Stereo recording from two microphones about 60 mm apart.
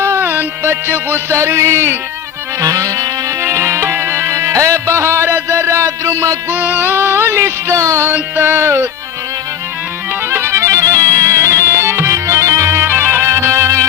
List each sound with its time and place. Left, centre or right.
0.2 s music: right
1.4 s a sound: right
2.6 s music: right
3.4 s music: right
6.5 s music: right
8.4 s music: right
10.2 s music: right
10.7 s music: right
12.9 s music: right